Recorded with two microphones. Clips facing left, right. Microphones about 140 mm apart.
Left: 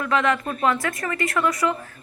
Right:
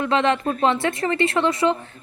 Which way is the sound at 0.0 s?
25° right (ahead or behind).